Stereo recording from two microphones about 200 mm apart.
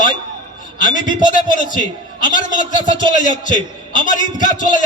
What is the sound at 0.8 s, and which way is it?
Speech, 40° left (ahead or behind).